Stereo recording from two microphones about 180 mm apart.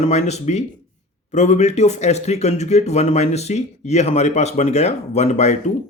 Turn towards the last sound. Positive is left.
turn(degrees=40)  # may be behind; listen again after turning